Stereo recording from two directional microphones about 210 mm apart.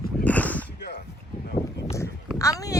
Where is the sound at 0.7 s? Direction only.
50° left (ahead or behind).